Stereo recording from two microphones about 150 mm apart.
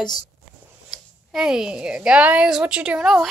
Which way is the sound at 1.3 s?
5° right (ahead or behind).